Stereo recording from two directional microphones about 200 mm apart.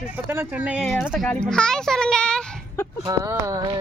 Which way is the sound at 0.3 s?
10° right (ahead or behind).